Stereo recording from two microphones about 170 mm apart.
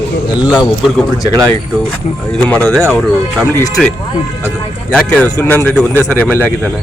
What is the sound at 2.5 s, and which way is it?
Speech, 5° left (ahead or behind).